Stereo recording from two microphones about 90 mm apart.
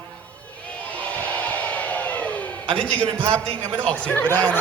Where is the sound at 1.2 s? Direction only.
15° left (ahead or behind).